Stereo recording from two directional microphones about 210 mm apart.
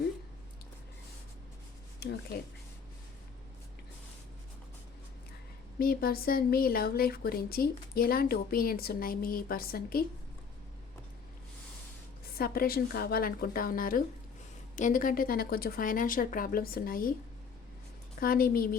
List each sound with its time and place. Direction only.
2.0 s speech: 50° left (ahead or behind)
5.8 s speech: 45° left (ahead or behind)
12.4 s speech: 45° left (ahead or behind)
18.2 s speech: 45° left (ahead or behind)